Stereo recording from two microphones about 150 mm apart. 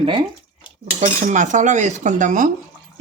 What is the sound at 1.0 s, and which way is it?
Cutlery, 55° right (ahead or behind).